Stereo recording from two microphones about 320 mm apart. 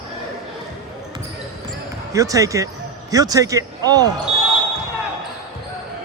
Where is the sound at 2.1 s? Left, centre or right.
Centre.